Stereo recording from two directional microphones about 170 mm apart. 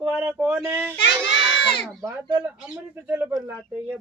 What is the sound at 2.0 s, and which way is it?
Speech, 20° right (ahead or behind).